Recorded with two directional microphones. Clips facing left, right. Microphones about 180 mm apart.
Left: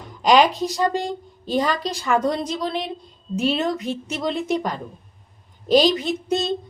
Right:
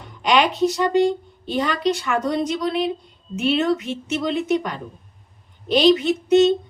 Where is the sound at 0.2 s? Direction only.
35° left (ahead or behind).